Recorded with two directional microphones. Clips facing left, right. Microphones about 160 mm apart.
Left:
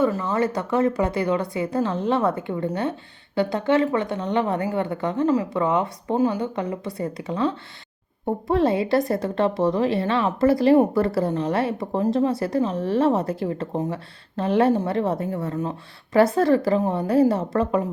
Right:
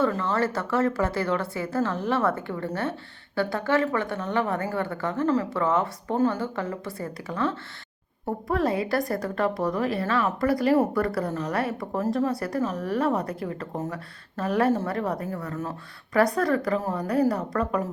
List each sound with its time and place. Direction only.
0.0 s a woman's voice: 10° left (ahead or behind)